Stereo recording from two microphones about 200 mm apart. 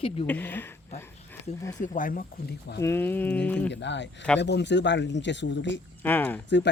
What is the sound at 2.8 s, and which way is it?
Speech, 10° left (ahead or behind).